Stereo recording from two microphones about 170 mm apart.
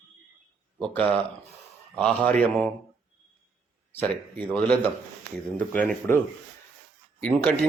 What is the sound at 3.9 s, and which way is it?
Speech, 10° left (ahead or behind).